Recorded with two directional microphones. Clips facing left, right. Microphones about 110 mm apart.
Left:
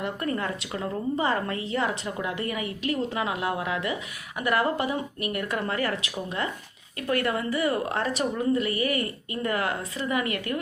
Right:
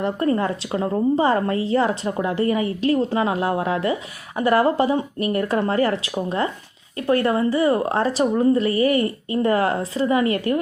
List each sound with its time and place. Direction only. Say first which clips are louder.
0.0 s a woman's voice: right 8 dB; 30° right (ahead or behind)